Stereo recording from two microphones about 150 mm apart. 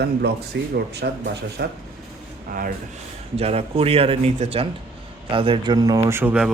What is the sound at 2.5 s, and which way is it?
Speech, 70° right (ahead or behind).